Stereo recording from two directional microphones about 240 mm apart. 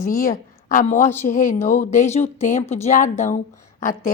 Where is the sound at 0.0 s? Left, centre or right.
Left.